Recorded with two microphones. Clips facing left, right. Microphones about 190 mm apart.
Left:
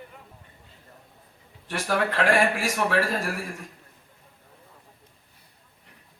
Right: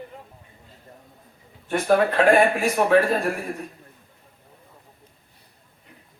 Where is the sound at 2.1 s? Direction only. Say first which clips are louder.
Right 5 dB; 90° left.